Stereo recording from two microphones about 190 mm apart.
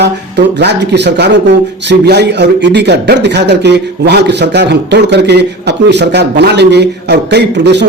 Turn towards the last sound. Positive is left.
turn(degrees=-60)  # may be behind; listen again after turning